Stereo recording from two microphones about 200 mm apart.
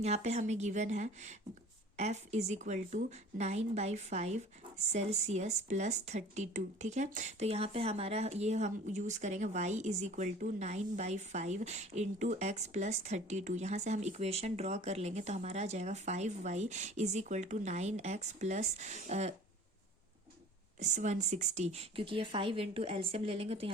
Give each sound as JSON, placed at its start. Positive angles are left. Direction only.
{"t": 0.0, "sound": "a woman's voice", "side_deg": -35}
{"t": 20.7, "sound": "speech", "side_deg": -35}